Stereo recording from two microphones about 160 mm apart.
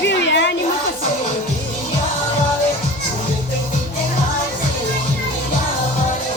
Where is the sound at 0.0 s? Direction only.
90° left.